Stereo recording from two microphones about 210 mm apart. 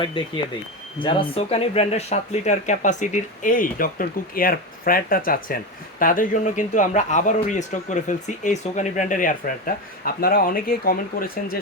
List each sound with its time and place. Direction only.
0.2 s speech: 25° left (ahead or behind); by 11.5 s 45° left (ahead or behind)